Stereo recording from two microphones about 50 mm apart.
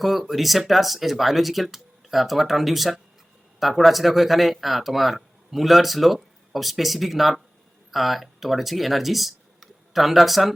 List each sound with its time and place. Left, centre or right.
0.0 s speech: centre